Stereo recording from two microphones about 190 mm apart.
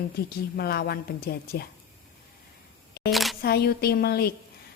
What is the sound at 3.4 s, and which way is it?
Speech, 55° left (ahead or behind).